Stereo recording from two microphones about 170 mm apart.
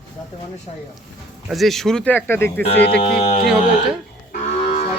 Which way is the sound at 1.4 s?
Centre (ahead or behind).